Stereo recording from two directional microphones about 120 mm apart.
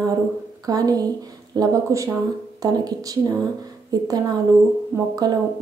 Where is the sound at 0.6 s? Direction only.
30° right (ahead or behind).